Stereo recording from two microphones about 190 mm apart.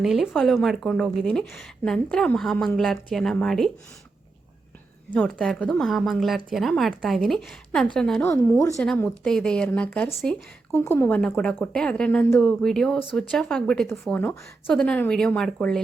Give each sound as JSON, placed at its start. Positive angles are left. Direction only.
{"t": 0.0, "sound": "a woman's voice", "side_deg": 0}
{"t": 5.1, "sound": "a woman's voice", "side_deg": 5}
{"t": 8.3, "sound": "a woman's voice", "side_deg": 15}
{"t": 8.8, "sound": "a woman's voice", "side_deg": 5}